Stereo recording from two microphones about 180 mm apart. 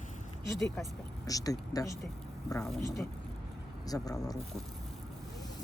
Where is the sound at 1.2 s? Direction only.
20° left (ahead or behind).